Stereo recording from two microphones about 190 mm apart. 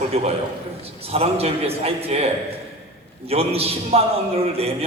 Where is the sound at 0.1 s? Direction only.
30° right (ahead or behind).